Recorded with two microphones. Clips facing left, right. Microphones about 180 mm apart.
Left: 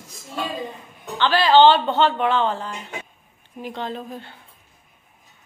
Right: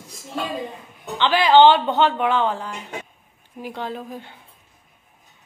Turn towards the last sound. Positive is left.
turn(degrees=-15)  # may be behind; listen again after turning